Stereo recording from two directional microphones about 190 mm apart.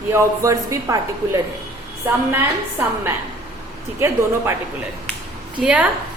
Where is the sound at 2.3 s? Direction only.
10° right (ahead or behind).